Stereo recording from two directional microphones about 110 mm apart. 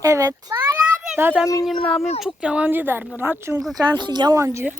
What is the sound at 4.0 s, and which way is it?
Speech, 40° right (ahead or behind).